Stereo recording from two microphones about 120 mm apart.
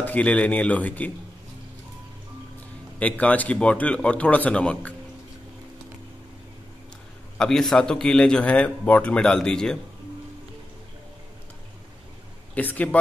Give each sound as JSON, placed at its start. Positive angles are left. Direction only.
{"t": 0.0, "sound": "a man's voice", "side_deg": 10}
{"t": 3.0, "sound": "a man's voice", "side_deg": 10}
{"t": 7.3, "sound": "a man's voice", "side_deg": 5}
{"t": 12.5, "sound": "a man's voice", "side_deg": 15}